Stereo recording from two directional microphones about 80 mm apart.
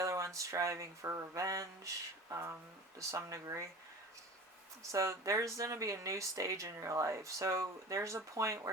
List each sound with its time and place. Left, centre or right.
0.0 s speech: right
4.8 s speech: right